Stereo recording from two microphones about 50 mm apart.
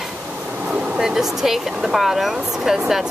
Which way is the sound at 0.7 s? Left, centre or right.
Right.